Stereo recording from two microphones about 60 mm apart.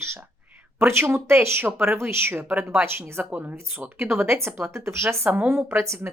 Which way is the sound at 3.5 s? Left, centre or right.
Right.